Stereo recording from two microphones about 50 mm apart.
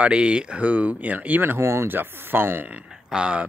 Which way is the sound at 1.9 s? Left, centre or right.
Right.